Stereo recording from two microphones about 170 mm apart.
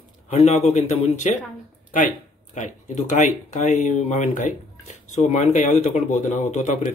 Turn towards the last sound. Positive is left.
turn(degrees=45)  # may be behind; listen again after turning